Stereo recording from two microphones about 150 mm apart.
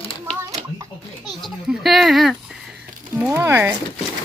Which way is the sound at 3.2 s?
15° right (ahead or behind).